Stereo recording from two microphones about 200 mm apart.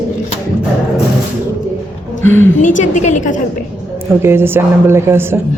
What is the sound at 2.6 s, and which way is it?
Speech, 40° left (ahead or behind).